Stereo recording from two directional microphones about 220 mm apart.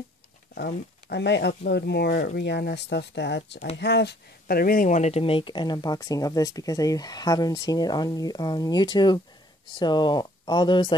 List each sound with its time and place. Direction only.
0.6 s speech: 45° left (ahead or behind); by 11.0 s 20° left (ahead or behind)